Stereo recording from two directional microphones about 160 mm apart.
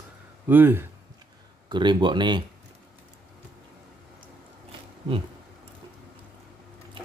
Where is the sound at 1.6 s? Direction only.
30° right (ahead or behind).